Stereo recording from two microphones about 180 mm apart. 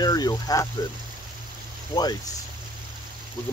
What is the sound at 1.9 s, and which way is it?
Speech, 20° left (ahead or behind).